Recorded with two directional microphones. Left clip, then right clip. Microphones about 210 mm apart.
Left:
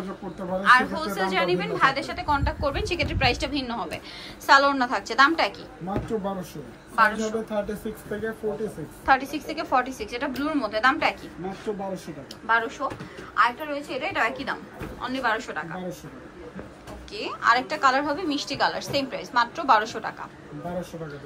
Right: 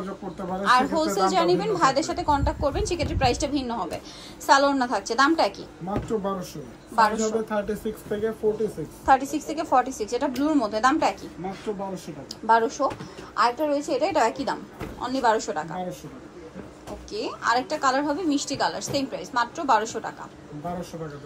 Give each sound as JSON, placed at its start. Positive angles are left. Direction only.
{"t": 0.7, "sound": "a woman's voice", "side_deg": -25}
{"t": 5.9, "sound": "speech", "side_deg": 0}
{"t": 7.0, "sound": "a woman's voice", "side_deg": -25}
{"t": 7.4, "sound": "speech", "side_deg": 0}
{"t": 9.0, "sound": "a woman's voice", "side_deg": -15}
{"t": 12.4, "sound": "a woman's voice", "side_deg": -25}
{"t": 17.1, "sound": "a woman's voice", "side_deg": -15}